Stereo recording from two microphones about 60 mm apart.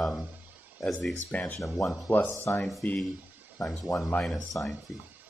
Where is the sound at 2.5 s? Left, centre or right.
Left.